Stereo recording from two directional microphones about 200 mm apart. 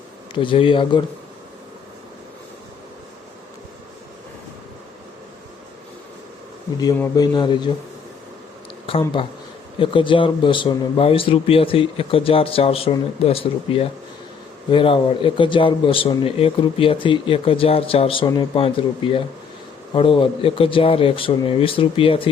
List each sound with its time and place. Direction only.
0.3 s a man's voice: 25° left (ahead or behind)
6.7 s a man's voice: 20° left (ahead or behind)
8.9 s a man's voice: 25° left (ahead or behind)